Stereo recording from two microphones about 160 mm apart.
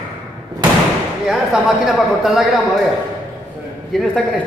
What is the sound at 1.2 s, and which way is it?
A man's voice, centre (ahead or behind).